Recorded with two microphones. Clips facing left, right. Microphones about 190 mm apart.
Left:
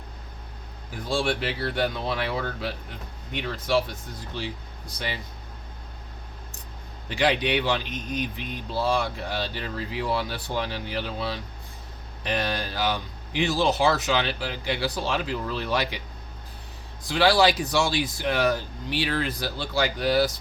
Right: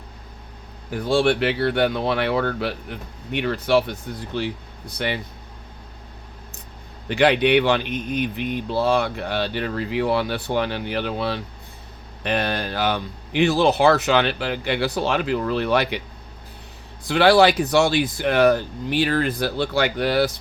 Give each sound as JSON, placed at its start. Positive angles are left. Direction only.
{"t": 0.9, "sound": "speech", "side_deg": -65}
{"t": 4.9, "sound": "speech", "side_deg": -65}
{"t": 7.1, "sound": "speech", "side_deg": -60}
{"t": 17.1, "sound": "speech", "side_deg": -60}